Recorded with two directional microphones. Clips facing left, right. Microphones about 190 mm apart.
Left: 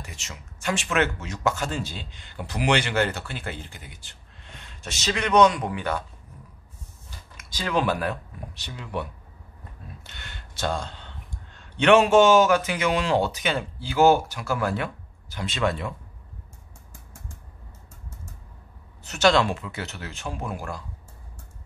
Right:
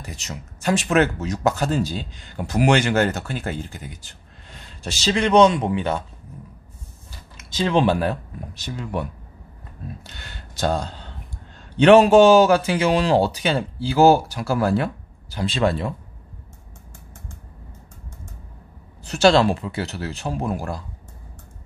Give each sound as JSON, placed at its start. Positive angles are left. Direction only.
{"t": 0.0, "sound": "speech", "side_deg": -40}
{"t": 7.3, "sound": "speech", "side_deg": -25}
{"t": 8.5, "sound": "speech", "side_deg": -45}
{"t": 10.0, "sound": "speech", "side_deg": -35}
{"t": 19.0, "sound": "speech", "side_deg": -30}